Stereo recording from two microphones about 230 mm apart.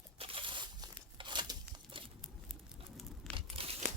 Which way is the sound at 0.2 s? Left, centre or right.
Right.